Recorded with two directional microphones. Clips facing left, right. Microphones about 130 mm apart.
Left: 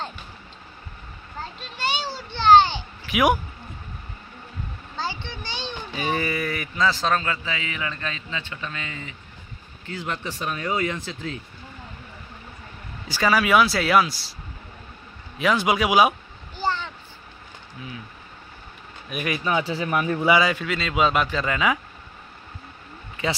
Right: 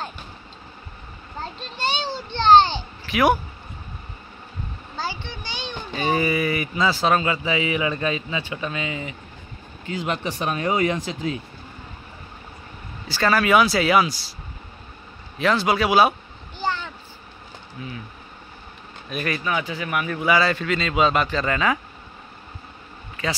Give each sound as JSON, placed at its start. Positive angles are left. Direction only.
{"t": 1.6, "sound": "a sound", "side_deg": 10}
{"t": 5.4, "sound": "a sound", "side_deg": 30}
{"t": 5.9, "sound": "a man's voice", "side_deg": -5}
{"t": 13.1, "sound": "speech", "side_deg": 10}
{"t": 15.3, "sound": "speech", "side_deg": 10}
{"t": 16.6, "sound": "vehicle", "side_deg": -5}
{"t": 19.0, "sound": "speech", "side_deg": 10}
{"t": 19.4, "sound": "speech", "side_deg": 30}
{"t": 20.3, "sound": "speech", "side_deg": 10}